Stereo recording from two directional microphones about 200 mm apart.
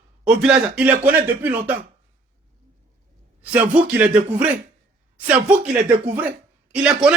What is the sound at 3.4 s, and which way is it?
Speech, 5° right (ahead or behind).